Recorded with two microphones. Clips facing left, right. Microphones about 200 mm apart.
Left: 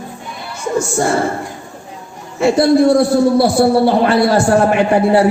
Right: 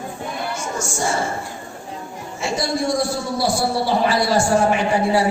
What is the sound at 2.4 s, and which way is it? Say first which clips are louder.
A man's voice: left 12 dB; 60° left (ahead or behind).